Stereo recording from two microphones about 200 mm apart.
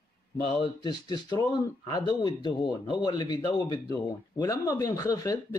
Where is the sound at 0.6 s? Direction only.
20° left (ahead or behind).